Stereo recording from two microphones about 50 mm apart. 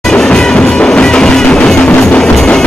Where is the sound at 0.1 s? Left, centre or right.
Centre.